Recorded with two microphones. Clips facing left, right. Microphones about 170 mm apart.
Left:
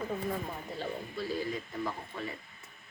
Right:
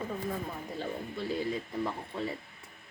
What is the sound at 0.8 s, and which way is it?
Speech, 20° right (ahead or behind).